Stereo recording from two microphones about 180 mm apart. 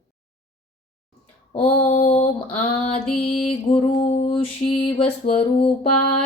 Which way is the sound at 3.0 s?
5° left (ahead or behind).